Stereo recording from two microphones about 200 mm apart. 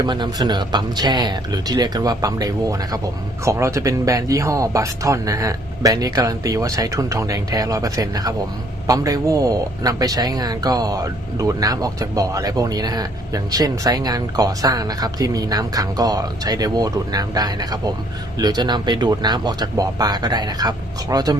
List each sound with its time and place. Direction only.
0.0 s speech: 20° right (ahead or behind)